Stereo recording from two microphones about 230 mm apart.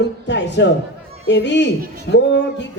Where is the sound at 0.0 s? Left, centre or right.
Left.